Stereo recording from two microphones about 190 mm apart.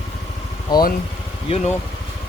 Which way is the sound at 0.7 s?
20° left (ahead or behind).